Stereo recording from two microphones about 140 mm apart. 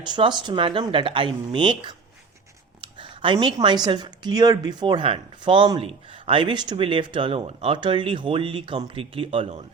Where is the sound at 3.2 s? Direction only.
35° right (ahead or behind).